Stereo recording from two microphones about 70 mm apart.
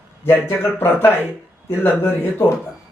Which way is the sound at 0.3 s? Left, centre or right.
Left.